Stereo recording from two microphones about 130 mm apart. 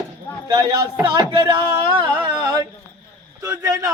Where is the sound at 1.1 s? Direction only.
30° right (ahead or behind).